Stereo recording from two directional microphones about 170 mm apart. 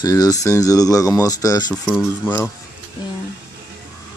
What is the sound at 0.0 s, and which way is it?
Speech, 20° left (ahead or behind).